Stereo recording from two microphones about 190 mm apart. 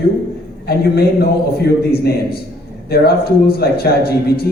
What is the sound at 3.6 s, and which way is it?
Speech, 55° left (ahead or behind).